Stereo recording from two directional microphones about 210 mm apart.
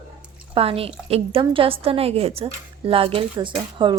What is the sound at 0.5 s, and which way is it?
A woman's voice, 25° right (ahead or behind).